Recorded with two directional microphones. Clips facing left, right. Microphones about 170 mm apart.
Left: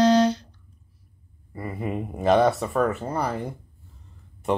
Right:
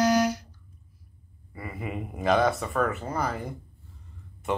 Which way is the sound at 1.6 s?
35° left (ahead or behind).